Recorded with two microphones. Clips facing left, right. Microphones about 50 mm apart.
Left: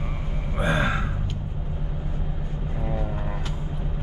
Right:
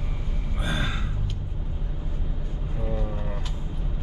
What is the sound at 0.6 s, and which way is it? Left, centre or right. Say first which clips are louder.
Gasp: left 7 dB; left.